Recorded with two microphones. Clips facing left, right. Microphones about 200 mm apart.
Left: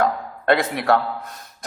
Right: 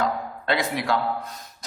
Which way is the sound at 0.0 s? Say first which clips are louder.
Left 4 dB; 55° left (ahead or behind).